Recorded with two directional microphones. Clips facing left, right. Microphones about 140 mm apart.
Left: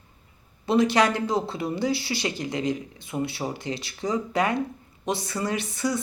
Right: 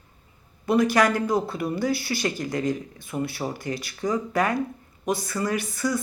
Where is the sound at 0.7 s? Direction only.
25° left (ahead or behind).